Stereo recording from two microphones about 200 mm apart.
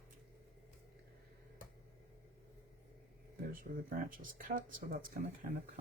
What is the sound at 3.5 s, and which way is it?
Speech, 45° right (ahead or behind).